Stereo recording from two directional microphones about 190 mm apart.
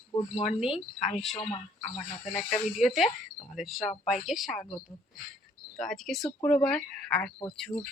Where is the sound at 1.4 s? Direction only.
30° left (ahead or behind).